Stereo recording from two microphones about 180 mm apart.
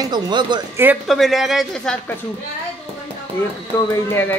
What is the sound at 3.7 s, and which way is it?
Speech, 15° left (ahead or behind).